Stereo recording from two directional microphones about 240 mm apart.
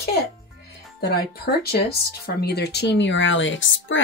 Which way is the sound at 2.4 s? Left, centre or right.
Left.